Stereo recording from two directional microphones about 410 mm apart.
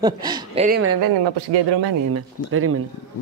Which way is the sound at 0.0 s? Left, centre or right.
Centre.